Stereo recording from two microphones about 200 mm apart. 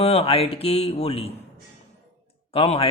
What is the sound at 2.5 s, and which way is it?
Speech, 30° left (ahead or behind).